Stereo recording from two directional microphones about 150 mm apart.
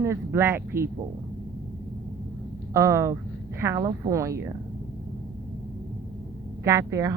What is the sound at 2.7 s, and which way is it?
Speech, 20° right (ahead or behind).